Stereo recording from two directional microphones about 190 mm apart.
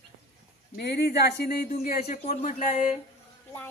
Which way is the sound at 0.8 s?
60° left (ahead or behind).